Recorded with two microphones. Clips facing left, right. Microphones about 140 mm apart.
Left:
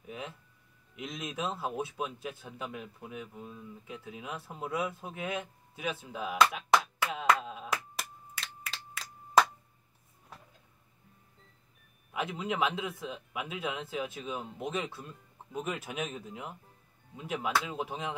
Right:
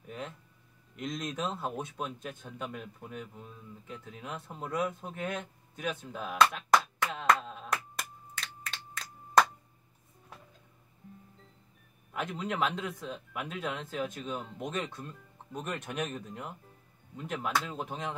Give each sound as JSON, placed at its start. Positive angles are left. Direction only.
{"t": 0.0, "sound": "a sound", "side_deg": 5}
{"t": 0.9, "sound": "speech", "side_deg": 5}
{"t": 12.1, "sound": "a man's voice", "side_deg": 5}